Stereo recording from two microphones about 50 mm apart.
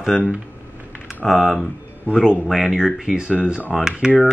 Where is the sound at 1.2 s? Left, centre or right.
Centre.